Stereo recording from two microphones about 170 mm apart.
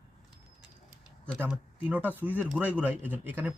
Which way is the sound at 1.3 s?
5° right (ahead or behind).